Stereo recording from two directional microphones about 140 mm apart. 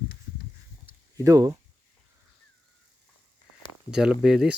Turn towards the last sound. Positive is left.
turn(degrees=-5)  # may be behind; listen again after turning